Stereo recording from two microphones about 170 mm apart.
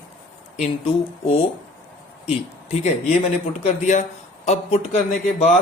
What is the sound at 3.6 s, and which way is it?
Speech, 45° left (ahead or behind).